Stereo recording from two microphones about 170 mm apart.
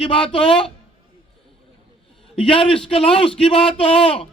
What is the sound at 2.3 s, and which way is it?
A man's voice, 30° left (ahead or behind).